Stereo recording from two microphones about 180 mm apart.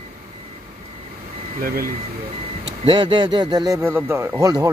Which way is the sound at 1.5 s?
55° right (ahead or behind).